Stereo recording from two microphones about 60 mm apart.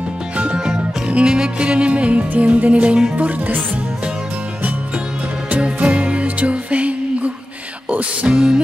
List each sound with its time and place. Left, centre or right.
0.4 s music: centre
5.5 s music: right
8.3 s speech: centre